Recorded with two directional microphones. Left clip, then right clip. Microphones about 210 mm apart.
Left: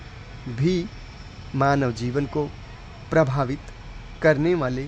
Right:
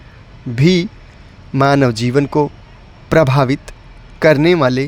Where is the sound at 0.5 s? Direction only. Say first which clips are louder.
Right 10 dB; 40° right (ahead or behind).